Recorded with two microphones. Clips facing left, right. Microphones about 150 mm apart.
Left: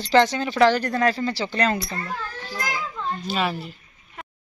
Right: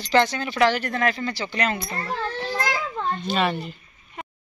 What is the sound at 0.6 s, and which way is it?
Speech, 35° left (ahead or behind).